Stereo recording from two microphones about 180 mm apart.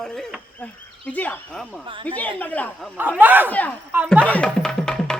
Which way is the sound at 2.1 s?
10° left (ahead or behind).